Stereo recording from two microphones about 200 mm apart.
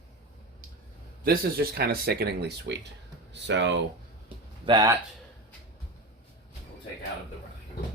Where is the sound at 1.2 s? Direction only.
50° right (ahead or behind).